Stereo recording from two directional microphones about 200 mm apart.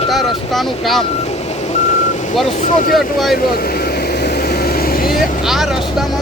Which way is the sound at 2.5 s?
40° left (ahead or behind).